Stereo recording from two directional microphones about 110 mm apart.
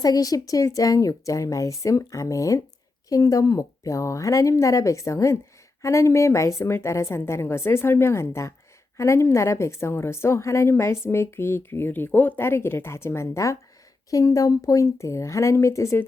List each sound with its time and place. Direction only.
0.0 s a woman's voice: 35° left (ahead or behind)